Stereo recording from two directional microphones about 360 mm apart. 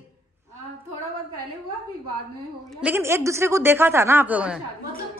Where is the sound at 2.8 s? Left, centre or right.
Centre.